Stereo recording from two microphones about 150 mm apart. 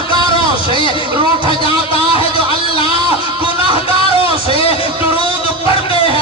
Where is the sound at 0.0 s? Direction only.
35° left (ahead or behind).